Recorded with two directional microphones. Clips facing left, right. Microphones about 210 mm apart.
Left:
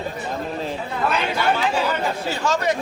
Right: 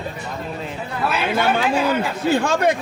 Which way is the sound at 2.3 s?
55° right (ahead or behind).